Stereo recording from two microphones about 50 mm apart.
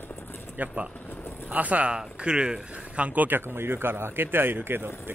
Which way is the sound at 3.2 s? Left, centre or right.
Right.